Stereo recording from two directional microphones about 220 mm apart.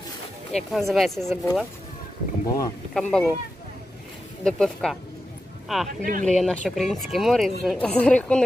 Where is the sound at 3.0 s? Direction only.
5° left (ahead or behind).